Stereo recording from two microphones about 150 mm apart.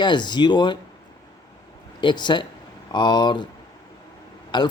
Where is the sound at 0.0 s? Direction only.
30° left (ahead or behind).